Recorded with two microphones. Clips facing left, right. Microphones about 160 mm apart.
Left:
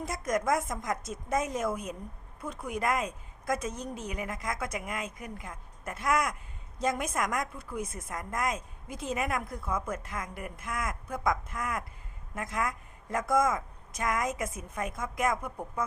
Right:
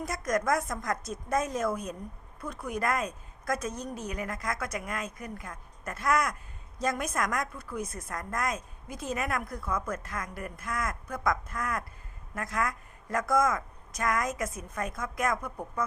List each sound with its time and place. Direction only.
0.0 s a woman's voice: 25° left (ahead or behind)